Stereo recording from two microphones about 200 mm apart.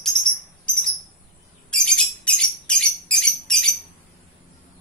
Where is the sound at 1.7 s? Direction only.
5° left (ahead or behind).